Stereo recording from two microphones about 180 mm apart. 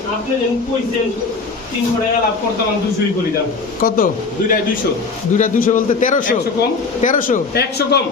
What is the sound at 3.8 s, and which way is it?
Speech, 55° left (ahead or behind).